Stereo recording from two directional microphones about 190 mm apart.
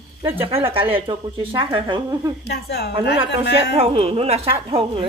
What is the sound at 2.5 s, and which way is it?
Speech, 60° left (ahead or behind).